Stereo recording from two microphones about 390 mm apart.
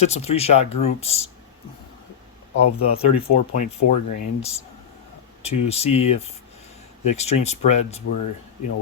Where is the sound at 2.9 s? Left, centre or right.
Centre.